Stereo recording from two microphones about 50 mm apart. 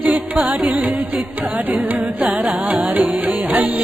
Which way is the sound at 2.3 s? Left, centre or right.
Right.